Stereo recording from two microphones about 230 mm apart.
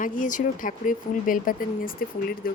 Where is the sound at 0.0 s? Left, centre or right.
Left.